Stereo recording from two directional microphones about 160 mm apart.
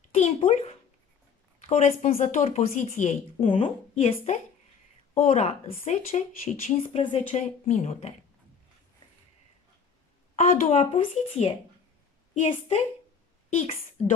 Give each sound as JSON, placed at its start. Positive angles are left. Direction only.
{"t": 0.1, "sound": "a woman's voice", "side_deg": 45}
{"t": 7.0, "sound": "a woman's voice", "side_deg": 30}
{"t": 7.3, "sound": "a woman's voice", "side_deg": 45}
{"t": 10.3, "sound": "a woman's voice", "side_deg": 45}